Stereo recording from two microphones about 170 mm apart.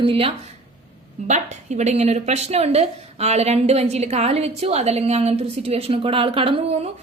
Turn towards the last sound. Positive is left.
turn(degrees=-30)  # may be behind; listen again after turning